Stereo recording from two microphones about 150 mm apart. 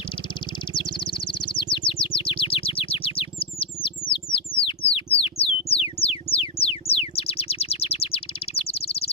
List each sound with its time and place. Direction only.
1.0 s chirp: 35° left (ahead or behind)
4.1 s music: 35° left (ahead or behind)